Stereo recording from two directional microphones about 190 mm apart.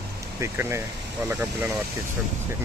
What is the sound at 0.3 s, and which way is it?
Speech, 15° right (ahead or behind).